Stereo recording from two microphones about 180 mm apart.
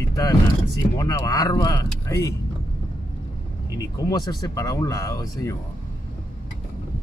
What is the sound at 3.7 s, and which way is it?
Speech, 20° left (ahead or behind).